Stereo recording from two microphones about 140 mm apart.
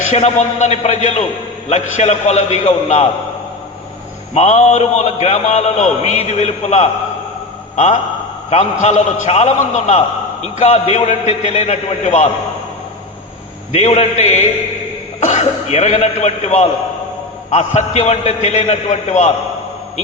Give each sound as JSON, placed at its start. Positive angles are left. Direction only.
{"t": 0.1, "sound": "a man's voice", "side_deg": 55}
{"t": 4.4, "sound": "a man's voice", "side_deg": 55}
{"t": 8.4, "sound": "a man's voice", "side_deg": 50}
{"t": 13.7, "sound": "a man's voice", "side_deg": 55}